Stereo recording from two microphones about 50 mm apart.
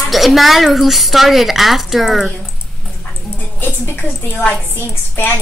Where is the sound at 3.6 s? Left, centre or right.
Left.